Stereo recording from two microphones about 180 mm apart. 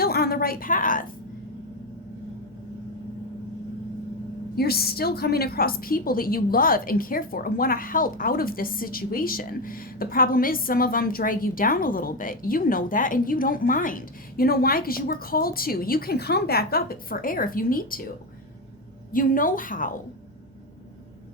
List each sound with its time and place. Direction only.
0.0 s a sound: 60° left (ahead or behind)
4.5 s a woman's voice: 60° left (ahead or behind)
19.1 s a woman's voice: 50° left (ahead or behind)